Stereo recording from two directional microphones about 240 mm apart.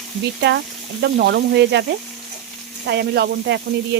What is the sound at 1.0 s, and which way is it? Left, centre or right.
Sizzle, right.